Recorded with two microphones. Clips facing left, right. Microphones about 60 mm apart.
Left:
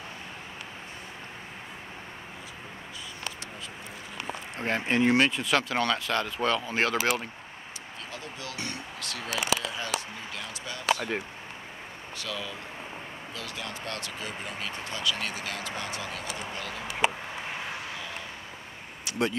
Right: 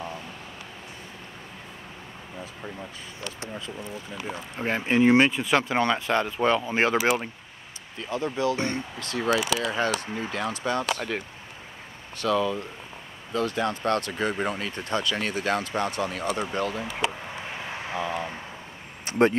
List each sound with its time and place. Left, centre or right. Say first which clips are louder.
4.6 s speech: right 3 dB; centre
8.1 s speech: right 16 dB; right
9.5 s speech: right 5 dB; right
12.2 s speech: right 13 dB; right
17.6 s vehicle: right 6 dB; right
19.0 s speech: right 8 dB; right